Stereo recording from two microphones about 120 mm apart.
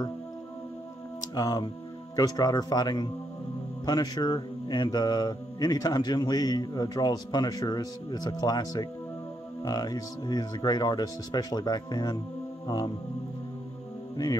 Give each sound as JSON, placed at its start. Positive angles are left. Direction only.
{"t": 1.3, "sound": "speech", "side_deg": 35}
{"t": 12.6, "sound": "music", "side_deg": 35}